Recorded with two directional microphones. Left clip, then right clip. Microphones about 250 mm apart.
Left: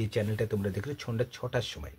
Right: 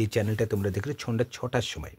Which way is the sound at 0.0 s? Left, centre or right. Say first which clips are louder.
Right 4 dB; right.